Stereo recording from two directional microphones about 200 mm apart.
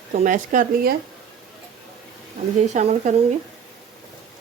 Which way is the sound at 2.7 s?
35° right (ahead or behind).